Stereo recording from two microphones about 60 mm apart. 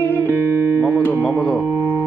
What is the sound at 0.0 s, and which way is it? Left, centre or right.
Music, left.